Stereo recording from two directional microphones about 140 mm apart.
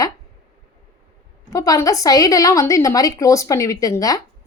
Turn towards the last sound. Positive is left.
turn(degrees=25)  # may be behind; listen again after turning